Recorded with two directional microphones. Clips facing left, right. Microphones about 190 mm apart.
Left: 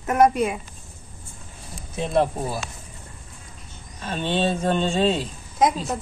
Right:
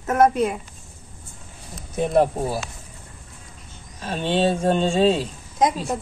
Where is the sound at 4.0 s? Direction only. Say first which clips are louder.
Right 1 dB; 35° right (ahead or behind).